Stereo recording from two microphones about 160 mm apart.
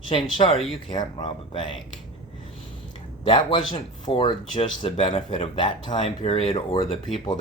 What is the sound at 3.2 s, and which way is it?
Speech, 30° left (ahead or behind).